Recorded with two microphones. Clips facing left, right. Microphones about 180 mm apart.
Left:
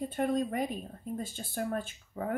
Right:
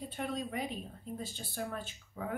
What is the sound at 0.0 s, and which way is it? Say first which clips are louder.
Speech: left 8 dB; 50° left (ahead or behind).